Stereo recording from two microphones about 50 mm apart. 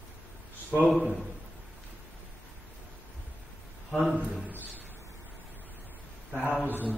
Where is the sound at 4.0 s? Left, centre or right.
Right.